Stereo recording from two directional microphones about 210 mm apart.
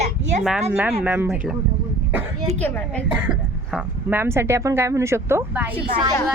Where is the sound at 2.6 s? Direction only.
10° left (ahead or behind).